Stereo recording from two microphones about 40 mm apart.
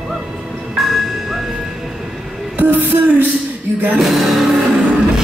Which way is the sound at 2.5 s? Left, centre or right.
Right.